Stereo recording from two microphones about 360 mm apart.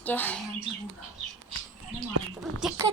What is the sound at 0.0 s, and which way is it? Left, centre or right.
Speech, centre.